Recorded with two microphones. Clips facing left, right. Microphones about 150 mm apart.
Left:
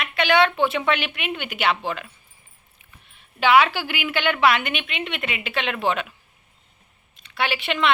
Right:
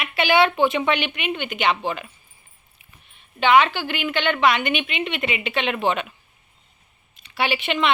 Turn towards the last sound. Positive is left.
turn(degrees=0)  # may be behind; listen again after turning